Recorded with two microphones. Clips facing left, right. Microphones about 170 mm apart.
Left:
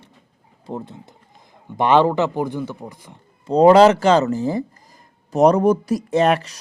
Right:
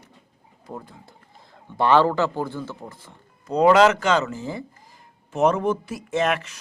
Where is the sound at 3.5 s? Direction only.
30° left (ahead or behind).